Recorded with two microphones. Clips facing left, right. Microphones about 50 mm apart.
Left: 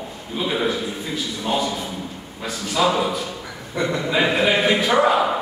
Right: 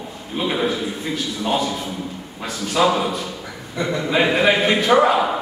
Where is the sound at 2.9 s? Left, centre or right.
Centre.